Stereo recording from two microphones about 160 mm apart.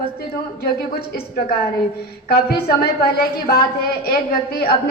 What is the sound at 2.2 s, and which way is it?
Speech, 70° left (ahead or behind).